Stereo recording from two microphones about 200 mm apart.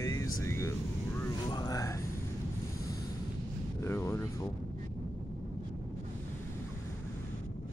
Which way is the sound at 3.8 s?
15° left (ahead or behind).